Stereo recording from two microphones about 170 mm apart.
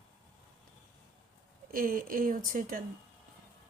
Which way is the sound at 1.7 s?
55° right (ahead or behind).